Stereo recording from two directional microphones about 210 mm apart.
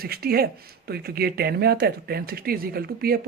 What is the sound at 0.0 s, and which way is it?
Speech, 45° right (ahead or behind).